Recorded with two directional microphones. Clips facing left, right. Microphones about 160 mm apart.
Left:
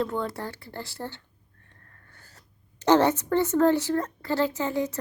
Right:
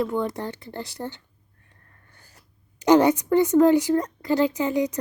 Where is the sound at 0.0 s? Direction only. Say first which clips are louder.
Right 3 dB; 15° right (ahead or behind).